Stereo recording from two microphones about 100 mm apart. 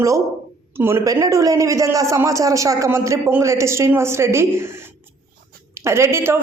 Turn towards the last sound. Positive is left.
turn(degrees=-25)  # may be behind; listen again after turning